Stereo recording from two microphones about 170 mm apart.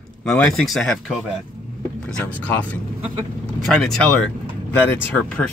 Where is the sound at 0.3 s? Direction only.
5° left (ahead or behind).